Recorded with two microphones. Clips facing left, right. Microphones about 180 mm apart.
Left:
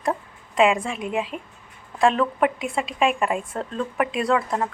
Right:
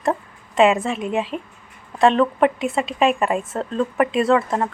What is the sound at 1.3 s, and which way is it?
Speech, 40° right (ahead or behind).